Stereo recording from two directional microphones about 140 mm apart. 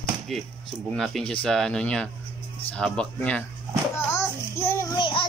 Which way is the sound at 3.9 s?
20° left (ahead or behind).